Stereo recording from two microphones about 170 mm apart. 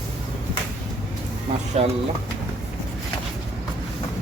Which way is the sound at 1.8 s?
40° right (ahead or behind).